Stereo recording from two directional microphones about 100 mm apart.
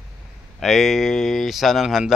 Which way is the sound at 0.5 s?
Centre (ahead or behind).